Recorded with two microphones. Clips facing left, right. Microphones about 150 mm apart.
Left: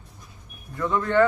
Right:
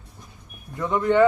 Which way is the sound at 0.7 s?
20° right (ahead or behind).